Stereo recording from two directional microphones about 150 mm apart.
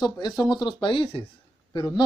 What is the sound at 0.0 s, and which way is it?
Speech, 30° left (ahead or behind).